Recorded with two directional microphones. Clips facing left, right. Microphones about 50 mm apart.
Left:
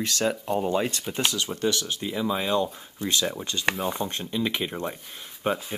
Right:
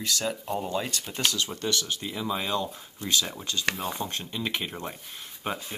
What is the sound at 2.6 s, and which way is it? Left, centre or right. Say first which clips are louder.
Speech: left 5 dB; left.